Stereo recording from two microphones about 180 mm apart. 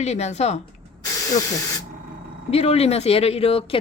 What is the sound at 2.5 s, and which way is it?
Speech, 35° left (ahead or behind).